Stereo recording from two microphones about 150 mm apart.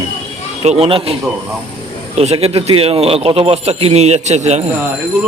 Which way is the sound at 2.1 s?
45° right (ahead or behind).